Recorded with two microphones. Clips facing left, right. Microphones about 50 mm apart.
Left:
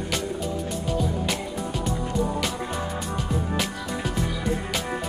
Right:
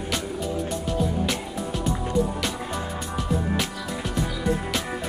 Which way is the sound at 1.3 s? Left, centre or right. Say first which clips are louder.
Even; centre.